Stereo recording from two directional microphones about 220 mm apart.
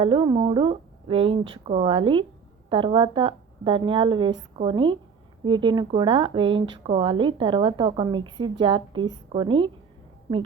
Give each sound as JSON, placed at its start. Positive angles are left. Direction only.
{"t": 0.0, "sound": "speech", "side_deg": -25}